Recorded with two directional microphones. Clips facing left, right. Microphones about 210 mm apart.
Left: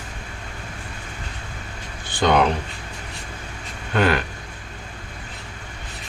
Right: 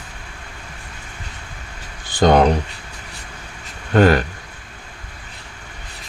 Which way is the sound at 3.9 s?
40° right (ahead or behind).